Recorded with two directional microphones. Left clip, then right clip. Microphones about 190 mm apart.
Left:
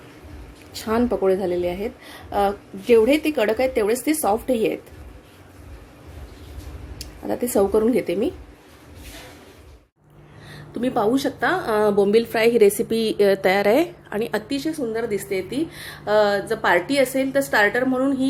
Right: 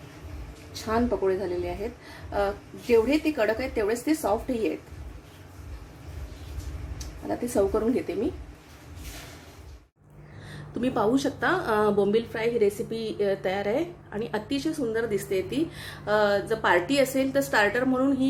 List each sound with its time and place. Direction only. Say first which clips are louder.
0.7 s a woman's voice: left 4 dB; 50° left (ahead or behind)
7.3 s a woman's voice: left 5 dB; 55° left (ahead or behind)
10.5 s a woman's voice: left 5 dB; 15° left (ahead or behind)
12.1 s a woman's voice: left 8 dB; 40° left (ahead or behind)
14.5 s a woman's voice: left 3 dB; 15° left (ahead or behind)